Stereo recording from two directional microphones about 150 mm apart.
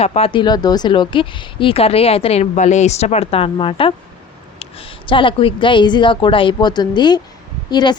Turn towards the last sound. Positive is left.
turn(degrees=30)  # may be behind; listen again after turning